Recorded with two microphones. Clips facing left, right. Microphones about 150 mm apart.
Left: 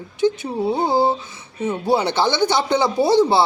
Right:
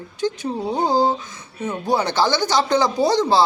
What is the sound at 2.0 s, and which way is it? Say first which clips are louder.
Speech: left 1 dB; 20° left (ahead or behind).